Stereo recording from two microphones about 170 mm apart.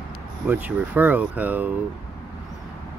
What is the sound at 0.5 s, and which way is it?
Speech, 10° right (ahead or behind).